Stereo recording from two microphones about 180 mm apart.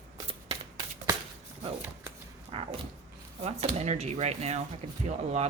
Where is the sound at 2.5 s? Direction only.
30° right (ahead or behind).